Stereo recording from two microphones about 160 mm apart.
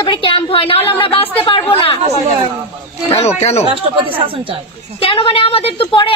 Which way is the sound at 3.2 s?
40° left (ahead or behind).